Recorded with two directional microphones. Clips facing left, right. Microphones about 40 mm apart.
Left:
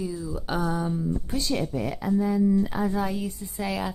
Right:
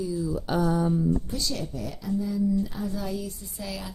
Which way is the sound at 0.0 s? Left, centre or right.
Left.